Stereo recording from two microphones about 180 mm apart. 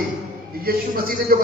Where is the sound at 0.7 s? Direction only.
60° right (ahead or behind).